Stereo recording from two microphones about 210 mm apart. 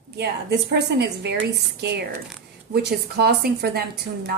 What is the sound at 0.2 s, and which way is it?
A woman's voice, 55° right (ahead or behind).